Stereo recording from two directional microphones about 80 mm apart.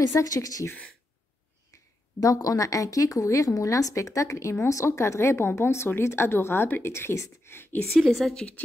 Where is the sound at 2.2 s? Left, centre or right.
Left.